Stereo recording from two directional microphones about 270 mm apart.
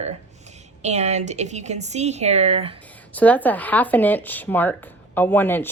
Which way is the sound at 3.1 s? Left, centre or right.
Centre.